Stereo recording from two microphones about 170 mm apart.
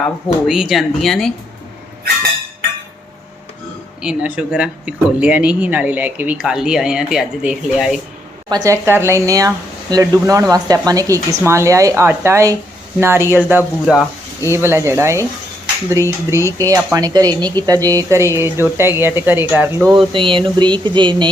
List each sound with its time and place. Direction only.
0.0 s speech: 5° right (ahead or behind)
4.0 s speech: 5° right (ahead or behind)
8.4 s speech: 20° right (ahead or behind)
13.8 s speech: centre (ahead or behind)
14.5 s speech: 15° right (ahead or behind)
19.9 s speech: 30° right (ahead or behind)